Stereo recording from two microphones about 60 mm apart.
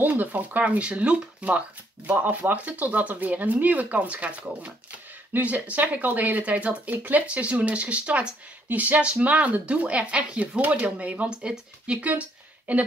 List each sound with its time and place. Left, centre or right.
0.0 s speech: right